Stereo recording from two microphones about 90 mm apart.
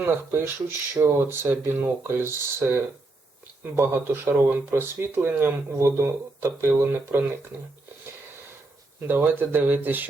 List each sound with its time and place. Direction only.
0.0 s speech: 25° right (ahead or behind)
9.0 s speech: 20° right (ahead or behind)